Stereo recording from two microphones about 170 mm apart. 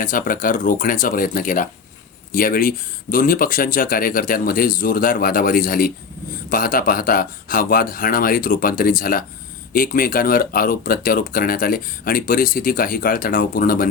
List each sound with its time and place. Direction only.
0.0 s speech: 55° left (ahead or behind)